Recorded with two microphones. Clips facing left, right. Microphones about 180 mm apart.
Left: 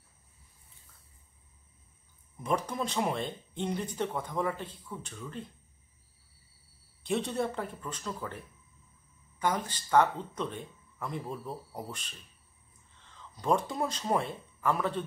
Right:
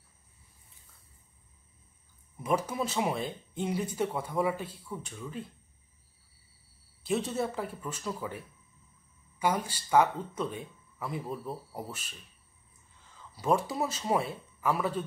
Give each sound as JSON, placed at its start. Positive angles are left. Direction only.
{"t": 2.3, "sound": "speech", "side_deg": -5}
{"t": 7.0, "sound": "speech", "side_deg": 0}
{"t": 9.4, "sound": "speech", "side_deg": -10}